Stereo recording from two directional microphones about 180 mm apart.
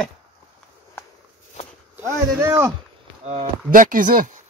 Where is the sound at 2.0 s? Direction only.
15° right (ahead or behind).